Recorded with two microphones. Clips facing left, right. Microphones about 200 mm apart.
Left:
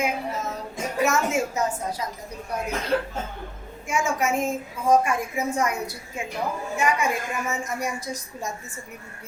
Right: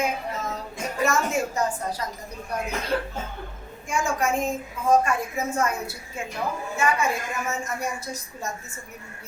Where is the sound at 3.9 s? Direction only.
5° left (ahead or behind).